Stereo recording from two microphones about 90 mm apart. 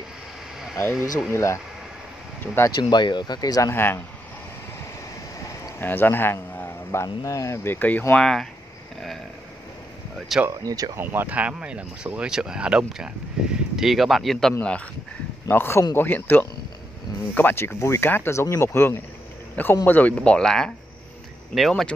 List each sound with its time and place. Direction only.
1.3 s speech: 30° left (ahead or behind)
2.8 s speech: 55° left (ahead or behind)
3.7 s speech: 25° left (ahead or behind)
5.8 s a man's voice: 25° left (ahead or behind)
8.2 s speech: 5° left (ahead or behind)
10.1 s speech: centre (ahead or behind)
10.6 s speech: 45° right (ahead or behind)
11.0 s speech: 20° right (ahead or behind); by 14.5 s centre (ahead or behind)
15.4 s speech: 30° left (ahead or behind); by 21.9 s 5° left (ahead or behind)